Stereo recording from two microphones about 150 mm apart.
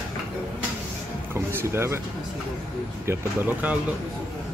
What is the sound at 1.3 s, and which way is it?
Speech, 15° right (ahead or behind).